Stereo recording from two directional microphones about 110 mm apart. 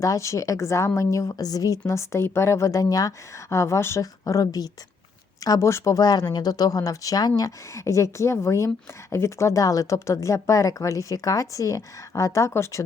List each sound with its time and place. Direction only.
0.0 s speech: 30° left (ahead or behind)